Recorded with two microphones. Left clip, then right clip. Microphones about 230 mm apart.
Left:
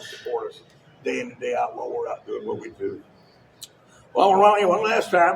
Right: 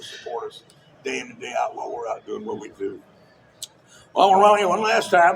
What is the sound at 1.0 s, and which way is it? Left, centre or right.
A man's voice, right.